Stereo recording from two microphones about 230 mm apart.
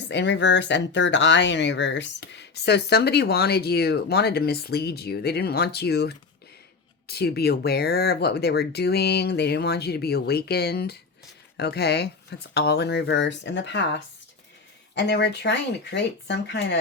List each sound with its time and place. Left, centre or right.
0.1 s speech: left
14.9 s speech: left